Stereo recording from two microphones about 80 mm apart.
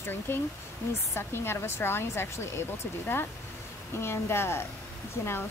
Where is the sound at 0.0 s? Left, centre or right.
Left.